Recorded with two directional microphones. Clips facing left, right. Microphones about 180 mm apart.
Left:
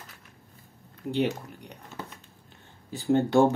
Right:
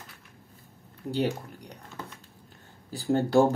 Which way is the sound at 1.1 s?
35° right (ahead or behind).